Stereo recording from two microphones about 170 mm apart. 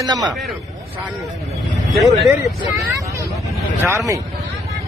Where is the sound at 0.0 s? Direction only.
20° right (ahead or behind).